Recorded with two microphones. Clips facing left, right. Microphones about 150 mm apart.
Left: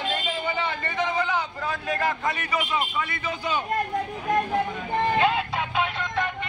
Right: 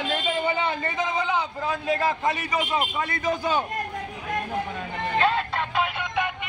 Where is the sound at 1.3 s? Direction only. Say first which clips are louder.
Right 2 dB; 25° right (ahead or behind); by 3.6 s 40° right (ahead or behind).